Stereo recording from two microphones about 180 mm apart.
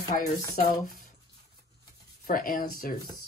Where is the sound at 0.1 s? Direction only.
40° left (ahead or behind).